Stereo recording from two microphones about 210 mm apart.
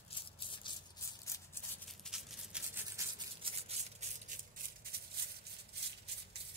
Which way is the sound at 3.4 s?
30° right (ahead or behind).